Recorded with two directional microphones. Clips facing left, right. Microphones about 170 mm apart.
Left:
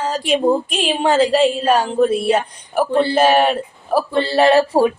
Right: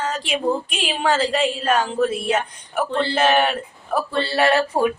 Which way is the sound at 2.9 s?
10° left (ahead or behind).